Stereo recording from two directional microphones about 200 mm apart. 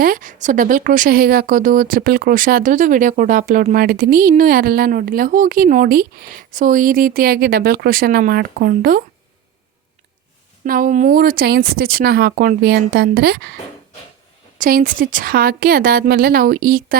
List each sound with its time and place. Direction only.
0.0 s speech: 40° right (ahead or behind)
10.6 s speech: 40° right (ahead or behind)
14.6 s speech: 45° right (ahead or behind)